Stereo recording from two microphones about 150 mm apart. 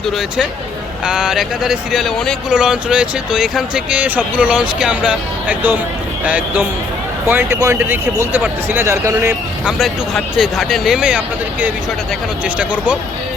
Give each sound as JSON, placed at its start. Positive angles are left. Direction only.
{"t": 1.0, "sound": "speech", "side_deg": -5}
{"t": 9.6, "sound": "speech", "side_deg": 0}
{"t": 12.5, "sound": "speech", "side_deg": -10}